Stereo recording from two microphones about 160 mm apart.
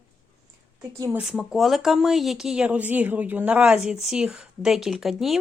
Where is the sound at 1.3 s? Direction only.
5° right (ahead or behind).